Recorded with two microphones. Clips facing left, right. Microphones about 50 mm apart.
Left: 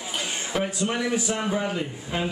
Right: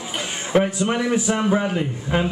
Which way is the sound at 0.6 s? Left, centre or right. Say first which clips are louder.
Right 5 dB; right.